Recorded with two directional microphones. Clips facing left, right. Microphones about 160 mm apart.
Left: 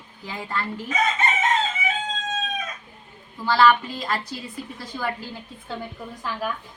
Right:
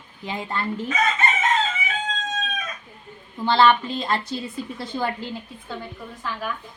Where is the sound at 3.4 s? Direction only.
25° right (ahead or behind).